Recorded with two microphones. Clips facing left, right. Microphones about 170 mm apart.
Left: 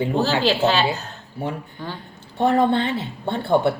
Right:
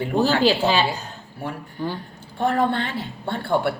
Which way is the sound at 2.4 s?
20° left (ahead or behind).